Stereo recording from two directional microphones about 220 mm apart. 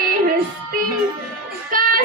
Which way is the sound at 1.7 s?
40° right (ahead or behind).